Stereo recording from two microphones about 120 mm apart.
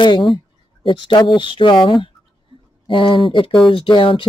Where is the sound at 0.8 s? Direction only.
40° left (ahead or behind).